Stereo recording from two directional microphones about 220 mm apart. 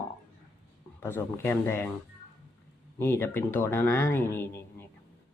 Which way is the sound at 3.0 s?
10° left (ahead or behind).